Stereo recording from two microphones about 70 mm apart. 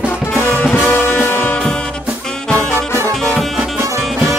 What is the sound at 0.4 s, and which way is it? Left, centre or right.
Music, left.